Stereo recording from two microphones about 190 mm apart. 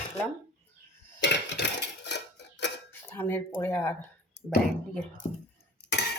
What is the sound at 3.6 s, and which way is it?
Speech, 10° left (ahead or behind).